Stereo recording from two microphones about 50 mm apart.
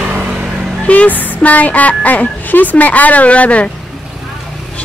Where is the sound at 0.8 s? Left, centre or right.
Left.